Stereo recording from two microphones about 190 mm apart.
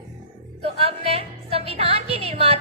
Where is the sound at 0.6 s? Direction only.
30° right (ahead or behind).